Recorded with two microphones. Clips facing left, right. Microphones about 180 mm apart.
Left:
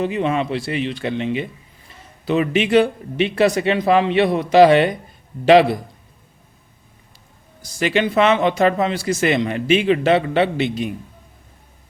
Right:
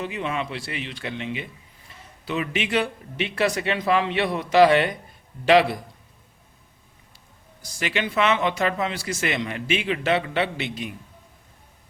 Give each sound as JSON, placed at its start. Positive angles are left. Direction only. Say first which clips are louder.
{"t": 0.0, "sound": "speech", "louder": "left 8 dB", "side_deg": 35}
{"t": 7.8, "sound": "speech", "louder": "left 7 dB", "side_deg": 35}